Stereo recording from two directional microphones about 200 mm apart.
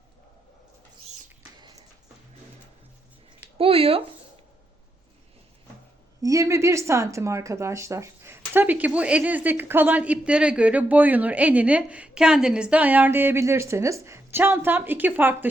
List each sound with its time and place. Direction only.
3.6 s speech: 30° right (ahead or behind)
6.2 s speech: 15° right (ahead or behind)